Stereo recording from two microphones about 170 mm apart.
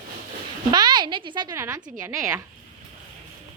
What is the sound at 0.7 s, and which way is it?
A woman's voice, 25° right (ahead or behind).